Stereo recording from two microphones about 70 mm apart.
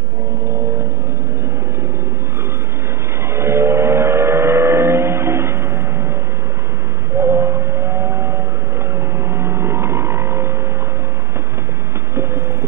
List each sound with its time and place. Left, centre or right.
3.3 s vehicle: right
7.2 s vehicle: right